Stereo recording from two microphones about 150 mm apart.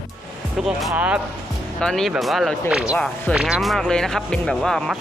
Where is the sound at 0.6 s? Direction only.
Centre (ahead or behind).